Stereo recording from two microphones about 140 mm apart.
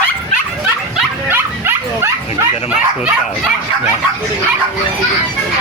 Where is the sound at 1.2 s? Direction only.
15° right (ahead or behind).